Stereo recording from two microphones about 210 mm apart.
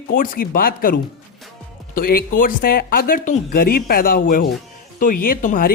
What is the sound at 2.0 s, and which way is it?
Speech, 45° left (ahead or behind).